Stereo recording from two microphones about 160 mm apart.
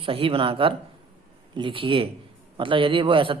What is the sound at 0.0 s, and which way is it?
Speech, 35° right (ahead or behind).